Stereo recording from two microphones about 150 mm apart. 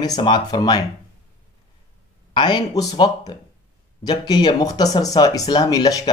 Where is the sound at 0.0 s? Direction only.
30° left (ahead or behind).